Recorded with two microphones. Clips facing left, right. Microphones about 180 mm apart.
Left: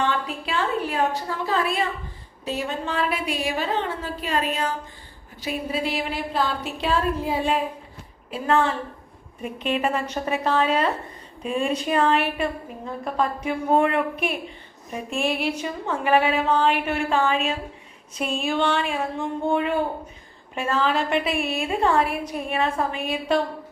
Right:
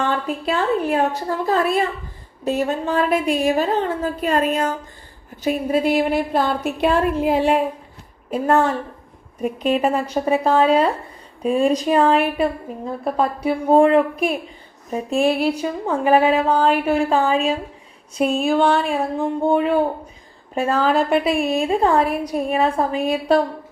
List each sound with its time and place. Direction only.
0.1 s a woman's voice: 40° right (ahead or behind); by 7.6 s 75° right (ahead or behind)
8.3 s a woman's voice: 45° right (ahead or behind)